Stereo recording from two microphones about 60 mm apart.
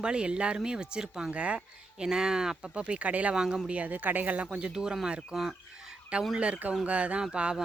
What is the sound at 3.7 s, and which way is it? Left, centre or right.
Speech, right.